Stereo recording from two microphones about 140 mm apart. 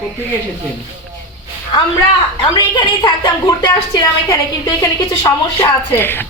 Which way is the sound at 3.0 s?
30° left (ahead or behind).